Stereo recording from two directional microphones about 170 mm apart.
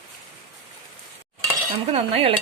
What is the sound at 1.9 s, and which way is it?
Speech, 35° right (ahead or behind).